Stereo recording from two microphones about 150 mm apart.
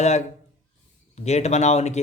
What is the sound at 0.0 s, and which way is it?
Speech, 50° left (ahead or behind).